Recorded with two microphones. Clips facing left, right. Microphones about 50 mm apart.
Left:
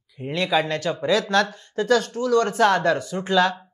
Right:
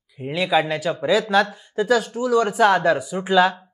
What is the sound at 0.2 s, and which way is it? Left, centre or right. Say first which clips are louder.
Speech: right 2 dB; centre.